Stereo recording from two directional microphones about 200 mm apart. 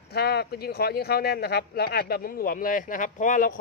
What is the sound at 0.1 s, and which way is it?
Speech, 55° left (ahead or behind).